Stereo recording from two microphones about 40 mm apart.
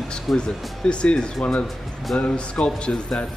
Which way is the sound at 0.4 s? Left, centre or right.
Left.